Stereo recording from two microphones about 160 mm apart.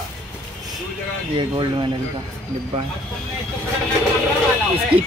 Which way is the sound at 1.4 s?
30° right (ahead or behind).